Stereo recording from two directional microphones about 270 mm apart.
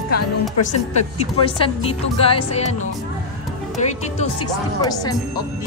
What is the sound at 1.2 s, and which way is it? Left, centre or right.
Speech, centre.